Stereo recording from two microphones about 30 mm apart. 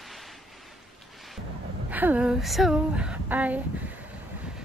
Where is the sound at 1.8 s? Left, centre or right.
Right.